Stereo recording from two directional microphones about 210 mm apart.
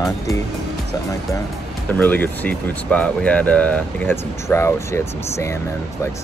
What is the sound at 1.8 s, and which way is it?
Speech, 10° left (ahead or behind).